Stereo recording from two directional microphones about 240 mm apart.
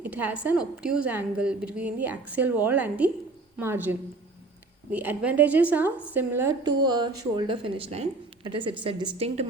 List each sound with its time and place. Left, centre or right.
0.0 s a woman's voice: centre; by 9.5 s right